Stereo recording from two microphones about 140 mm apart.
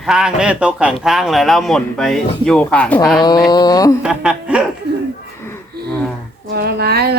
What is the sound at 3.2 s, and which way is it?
Speech, 30° left (ahead or behind).